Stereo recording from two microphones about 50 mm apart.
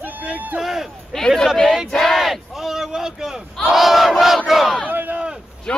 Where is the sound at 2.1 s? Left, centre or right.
Centre.